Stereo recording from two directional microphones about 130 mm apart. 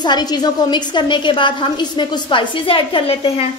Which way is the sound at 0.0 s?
35° left (ahead or behind).